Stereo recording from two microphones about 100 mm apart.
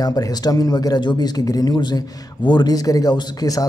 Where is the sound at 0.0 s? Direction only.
40° left (ahead or behind).